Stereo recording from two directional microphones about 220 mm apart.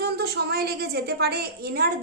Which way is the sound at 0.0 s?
45° right (ahead or behind).